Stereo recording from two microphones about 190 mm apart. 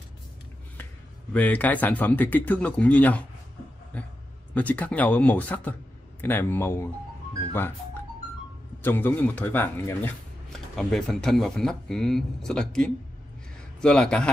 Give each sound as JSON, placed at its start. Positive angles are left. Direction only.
{"t": 1.3, "sound": "speech", "side_deg": 10}
{"t": 8.8, "sound": "speech", "side_deg": 10}